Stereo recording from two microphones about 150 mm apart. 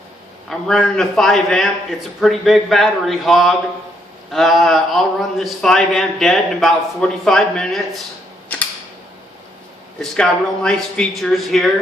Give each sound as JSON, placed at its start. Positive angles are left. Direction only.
{"t": 0.4, "sound": "a man's voice", "side_deg": 0}
{"t": 10.0, "sound": "a man's voice", "side_deg": 5}